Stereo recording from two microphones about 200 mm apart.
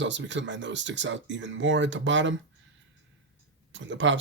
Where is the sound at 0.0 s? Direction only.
65° right (ahead or behind).